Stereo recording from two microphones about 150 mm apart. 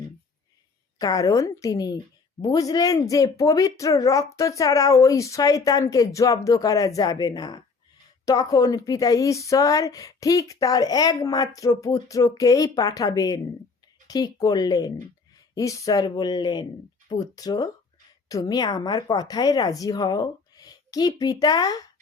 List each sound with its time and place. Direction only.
0.9 s speech: 25° left (ahead or behind)